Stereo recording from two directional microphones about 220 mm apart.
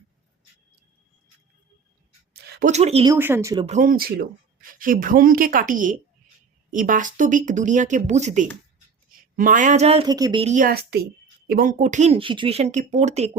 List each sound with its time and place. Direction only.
2.3 s a sound: 50° right (ahead or behind)
2.6 s speech: 30° right (ahead or behind)
3.1 s speech: 10° right (ahead or behind)
3.7 s speech: 40° right (ahead or behind); by 10.4 s 15° right (ahead or behind)
10.4 s speech: 35° right (ahead or behind)